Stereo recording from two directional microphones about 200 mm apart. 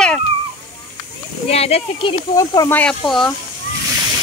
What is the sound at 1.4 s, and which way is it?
Speech, 30° left (ahead or behind).